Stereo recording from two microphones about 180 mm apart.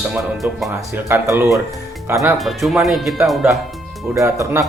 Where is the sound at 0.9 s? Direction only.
15° right (ahead or behind).